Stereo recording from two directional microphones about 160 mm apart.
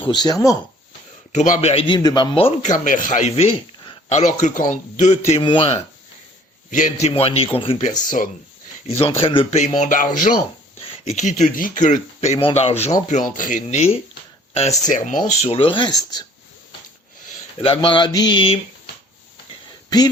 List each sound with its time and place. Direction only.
0.0 s speech: 25° left (ahead or behind)
1.3 s a man's voice: 50° left (ahead or behind)
1.7 s a man's voice: 30° left (ahead or behind)
6.7 s speech: 50° left (ahead or behind); by 7.9 s 35° left (ahead or behind)
7.9 s speech: 55° left (ahead or behind)
8.9 s speech: 40° left (ahead or behind)
10.8 s speech: 40° left (ahead or behind)
13.1 s a man's voice: 55° left (ahead or behind)
15.3 s speech: 40° left (ahead or behind)
17.6 s speech: 35° left (ahead or behind)